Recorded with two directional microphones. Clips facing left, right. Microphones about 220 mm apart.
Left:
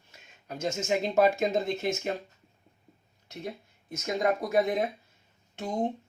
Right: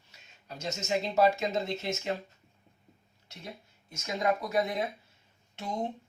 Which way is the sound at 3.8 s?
50° left (ahead or behind).